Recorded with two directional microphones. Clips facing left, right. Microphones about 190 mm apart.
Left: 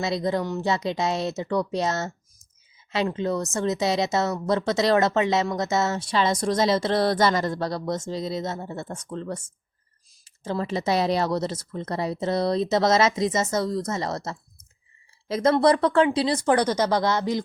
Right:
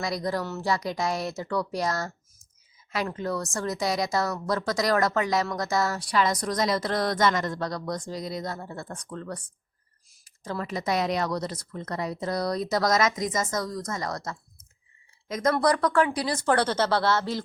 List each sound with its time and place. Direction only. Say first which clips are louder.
0.0 s a woman's voice: left 4 dB; 25° left (ahead or behind)